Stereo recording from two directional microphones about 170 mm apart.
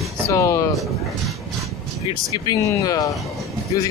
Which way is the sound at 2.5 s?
20° left (ahead or behind).